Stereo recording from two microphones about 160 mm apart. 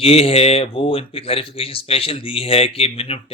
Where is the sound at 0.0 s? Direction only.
40° left (ahead or behind).